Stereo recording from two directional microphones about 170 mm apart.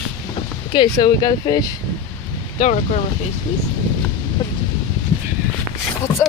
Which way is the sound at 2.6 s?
40° left (ahead or behind).